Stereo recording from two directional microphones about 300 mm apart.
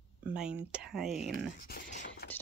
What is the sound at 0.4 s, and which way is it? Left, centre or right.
Speech, centre.